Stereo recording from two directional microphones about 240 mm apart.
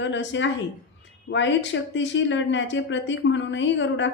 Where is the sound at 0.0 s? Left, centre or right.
Left.